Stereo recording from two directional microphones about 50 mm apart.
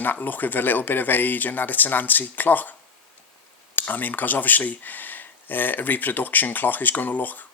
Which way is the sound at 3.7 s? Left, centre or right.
Left.